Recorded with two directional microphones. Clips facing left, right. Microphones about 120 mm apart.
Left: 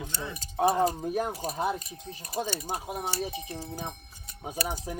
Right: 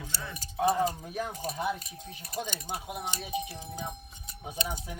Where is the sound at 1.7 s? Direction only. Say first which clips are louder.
Left 4 dB; 5° right (ahead or behind).